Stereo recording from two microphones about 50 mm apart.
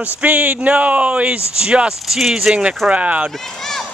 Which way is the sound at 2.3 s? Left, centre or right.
Centre.